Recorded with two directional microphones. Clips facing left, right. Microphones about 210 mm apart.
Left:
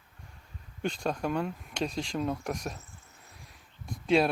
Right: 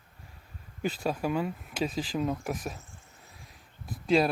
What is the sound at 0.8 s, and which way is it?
Speech, 5° right (ahead or behind).